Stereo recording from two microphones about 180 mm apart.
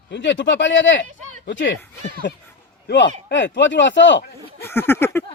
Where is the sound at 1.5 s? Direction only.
90° left.